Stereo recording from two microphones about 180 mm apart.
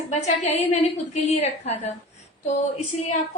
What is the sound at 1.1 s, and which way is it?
Speech, 35° left (ahead or behind).